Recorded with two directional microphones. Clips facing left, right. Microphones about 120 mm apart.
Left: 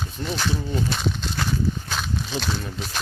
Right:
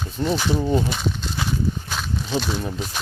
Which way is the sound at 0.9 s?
5° right (ahead or behind).